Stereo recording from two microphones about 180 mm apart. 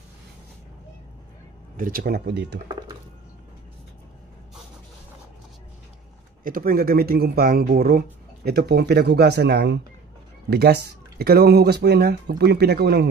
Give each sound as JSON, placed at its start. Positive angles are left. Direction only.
{"t": 1.8, "sound": "speech", "side_deg": -55}
{"t": 6.4, "sound": "speech", "side_deg": -55}